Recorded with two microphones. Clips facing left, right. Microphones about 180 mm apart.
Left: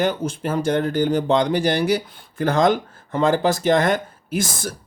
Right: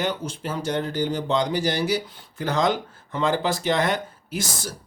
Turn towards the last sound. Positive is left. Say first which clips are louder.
# left 5 dB
turn(degrees=55)  # may be behind; listen again after turning